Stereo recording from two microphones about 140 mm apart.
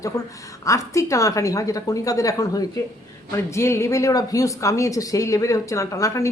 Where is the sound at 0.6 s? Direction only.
20° left (ahead or behind).